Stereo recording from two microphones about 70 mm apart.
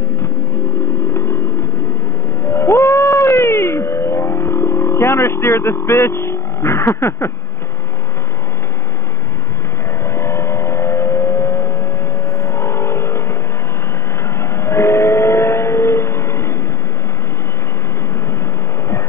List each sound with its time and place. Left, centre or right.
2.4 s cat: left
4.0 s music: left
4.4 s speech: left
10.0 s vehicle: left
14.4 s train: left